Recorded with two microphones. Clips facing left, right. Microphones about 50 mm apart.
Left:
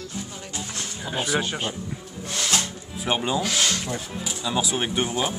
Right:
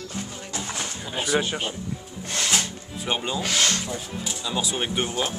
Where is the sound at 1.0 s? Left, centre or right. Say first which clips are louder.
Even; centre.